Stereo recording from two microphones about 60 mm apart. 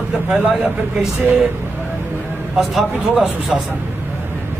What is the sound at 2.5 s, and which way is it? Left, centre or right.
A man's voice, centre.